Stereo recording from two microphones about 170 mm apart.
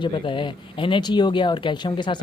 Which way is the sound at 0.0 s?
30° left (ahead or behind).